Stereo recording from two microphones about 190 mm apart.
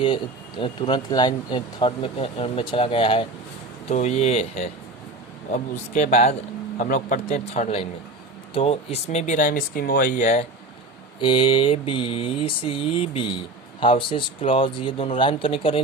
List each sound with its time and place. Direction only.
0.0 s mantra: 25° left (ahead or behind)
3.8 s speech: 35° left (ahead or behind)
11.2 s mantra: 25° left (ahead or behind)